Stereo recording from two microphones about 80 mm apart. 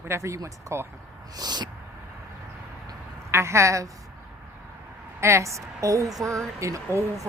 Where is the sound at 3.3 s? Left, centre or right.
Right.